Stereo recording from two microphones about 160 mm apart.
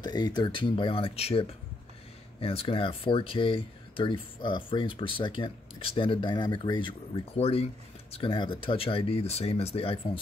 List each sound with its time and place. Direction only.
0.0 s speech: 25° left (ahead or behind)